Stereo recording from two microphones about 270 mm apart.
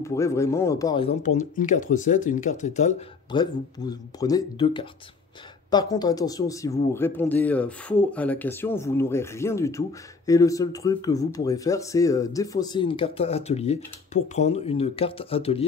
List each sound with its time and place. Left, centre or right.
0.0 s speech: centre